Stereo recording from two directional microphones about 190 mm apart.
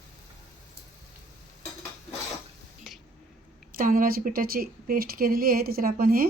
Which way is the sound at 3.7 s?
45° right (ahead or behind).